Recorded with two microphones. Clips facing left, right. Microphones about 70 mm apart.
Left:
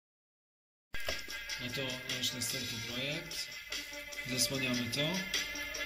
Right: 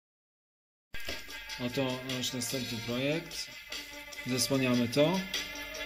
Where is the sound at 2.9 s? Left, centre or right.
Right.